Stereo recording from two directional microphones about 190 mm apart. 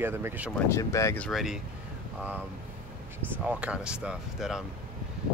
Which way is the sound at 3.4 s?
5° right (ahead or behind).